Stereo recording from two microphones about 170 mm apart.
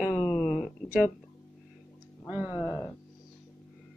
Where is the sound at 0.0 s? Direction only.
10° left (ahead or behind).